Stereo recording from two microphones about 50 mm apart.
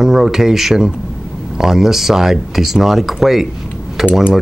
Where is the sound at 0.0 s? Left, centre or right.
Centre.